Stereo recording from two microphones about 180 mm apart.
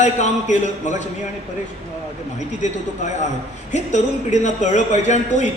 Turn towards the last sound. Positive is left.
turn(degrees=40)  # may be behind; listen again after turning